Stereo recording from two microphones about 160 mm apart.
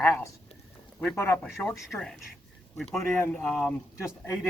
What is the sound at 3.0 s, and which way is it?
Speech, 15° left (ahead or behind).